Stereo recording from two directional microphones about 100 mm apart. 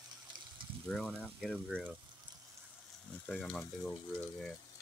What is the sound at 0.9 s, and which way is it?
Speech, centre (ahead or behind).